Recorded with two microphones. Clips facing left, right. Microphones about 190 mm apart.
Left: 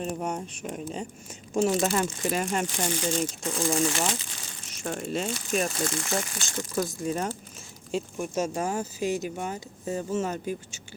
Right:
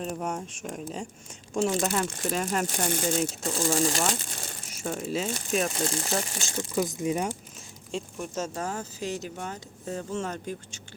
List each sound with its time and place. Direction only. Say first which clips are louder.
0.0 s speech: left 1 dB; centre (ahead or behind)
2.9 s speech: right 2 dB; 45° right (ahead or behind)
3.4 s speech: left 1 dB; 35° right (ahead or behind)
4.7 s speech: even; 5° right (ahead or behind)
5.8 s speech: even; 30° right (ahead or behind)
6.8 s speech: right 1 dB; 15° right (ahead or behind)
7.9 s speech: left 4 dB; 5° left (ahead or behind)